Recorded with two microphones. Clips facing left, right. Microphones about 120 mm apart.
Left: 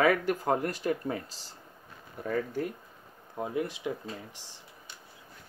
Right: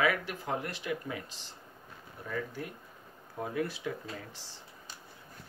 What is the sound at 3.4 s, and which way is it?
Speech, 20° left (ahead or behind).